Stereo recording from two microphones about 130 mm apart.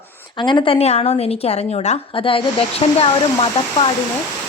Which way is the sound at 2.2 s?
45° left (ahead or behind).